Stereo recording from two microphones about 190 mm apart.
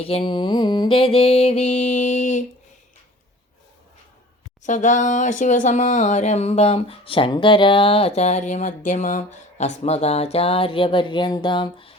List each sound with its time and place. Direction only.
0.0 s speech: 30° left (ahead or behind)
4.6 s speech: 40° left (ahead or behind)